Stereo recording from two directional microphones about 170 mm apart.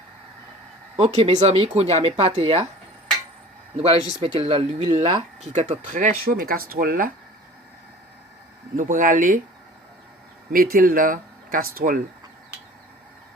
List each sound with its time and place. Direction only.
0.9 s speech: 35° right (ahead or behind)
4.2 s speech: 35° right (ahead or behind); by 7.1 s 55° right (ahead or behind)
8.7 s speech: 50° right (ahead or behind)
10.5 s speech: 55° right (ahead or behind)